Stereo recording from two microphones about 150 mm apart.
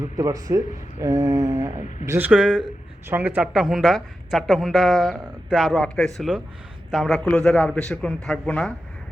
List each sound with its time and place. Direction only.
0.2 s a woman's voice: 25° right (ahead or behind); by 8.7 s 5° left (ahead or behind)